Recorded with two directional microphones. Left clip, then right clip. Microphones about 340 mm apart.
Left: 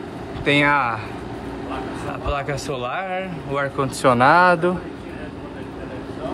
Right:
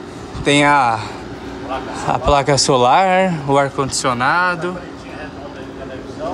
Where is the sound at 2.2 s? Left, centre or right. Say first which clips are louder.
Right 12 dB; centre.